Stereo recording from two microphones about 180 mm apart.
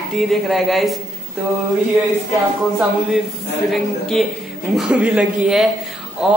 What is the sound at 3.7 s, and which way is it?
A man's voice, centre (ahead or behind).